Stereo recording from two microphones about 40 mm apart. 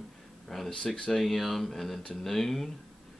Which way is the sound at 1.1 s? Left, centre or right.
Centre.